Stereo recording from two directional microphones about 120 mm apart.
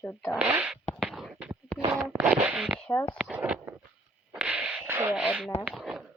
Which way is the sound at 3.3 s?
15° right (ahead or behind).